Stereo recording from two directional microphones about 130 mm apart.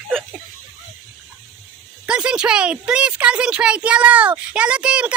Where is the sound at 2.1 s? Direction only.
10° right (ahead or behind).